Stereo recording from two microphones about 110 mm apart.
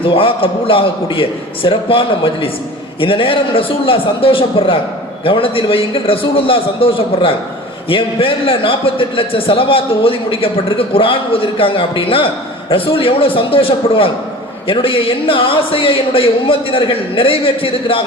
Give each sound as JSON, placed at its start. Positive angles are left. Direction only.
{"t": 0.0, "sound": "a man's voice", "side_deg": 55}